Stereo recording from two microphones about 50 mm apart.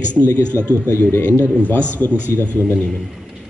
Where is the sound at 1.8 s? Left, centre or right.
Right.